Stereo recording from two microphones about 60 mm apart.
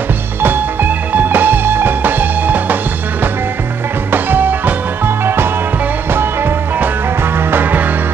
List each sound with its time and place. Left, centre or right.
0.4 s music: right